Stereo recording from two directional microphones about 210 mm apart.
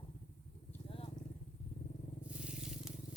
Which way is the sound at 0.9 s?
25° left (ahead or behind).